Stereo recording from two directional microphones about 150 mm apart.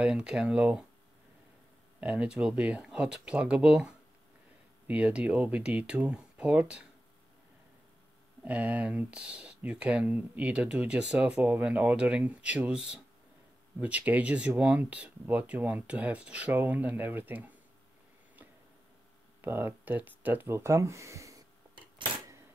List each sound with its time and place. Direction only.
0.0 s speech: 5° right (ahead or behind)
2.0 s speech: 10° right (ahead or behind)
8.5 s speech: 10° right (ahead or behind)
19.4 s speech: 15° right (ahead or behind)